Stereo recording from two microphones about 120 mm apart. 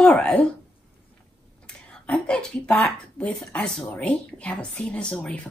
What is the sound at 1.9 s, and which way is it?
A woman's voice, 10° left (ahead or behind).